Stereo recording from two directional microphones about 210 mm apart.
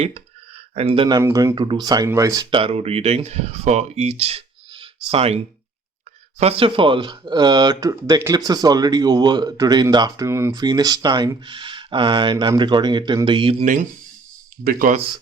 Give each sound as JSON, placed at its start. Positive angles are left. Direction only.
{"t": 0.8, "sound": "speech", "side_deg": -25}
{"t": 6.4, "sound": "speech", "side_deg": -25}